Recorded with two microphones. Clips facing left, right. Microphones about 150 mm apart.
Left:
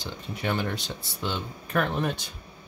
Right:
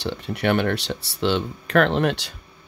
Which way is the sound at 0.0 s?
75° right (ahead or behind).